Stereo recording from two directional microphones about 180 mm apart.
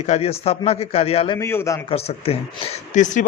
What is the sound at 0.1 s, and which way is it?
A man's voice, 35° left (ahead or behind).